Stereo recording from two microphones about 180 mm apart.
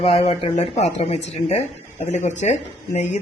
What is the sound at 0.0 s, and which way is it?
Speech, 35° left (ahead or behind).